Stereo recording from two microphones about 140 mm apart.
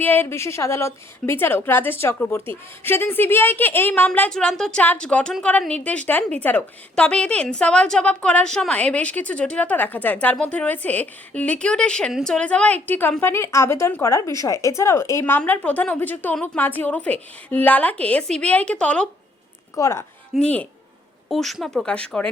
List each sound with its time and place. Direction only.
0.0 s a woman's voice: 15° left (ahead or behind)
19.7 s a woman's voice: 20° left (ahead or behind)
20.3 s a woman's voice: 10° left (ahead or behind)